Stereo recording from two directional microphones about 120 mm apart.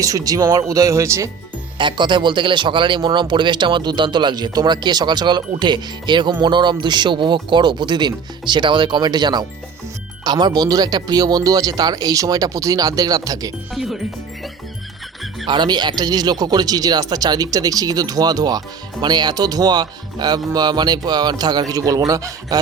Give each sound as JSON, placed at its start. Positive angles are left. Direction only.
{"t": 0.0, "sound": "speech", "side_deg": -30}
{"t": 1.8, "sound": "speech", "side_deg": -40}
{"t": 13.7, "sound": "speech", "side_deg": 0}
{"t": 15.4, "sound": "speech", "side_deg": -35}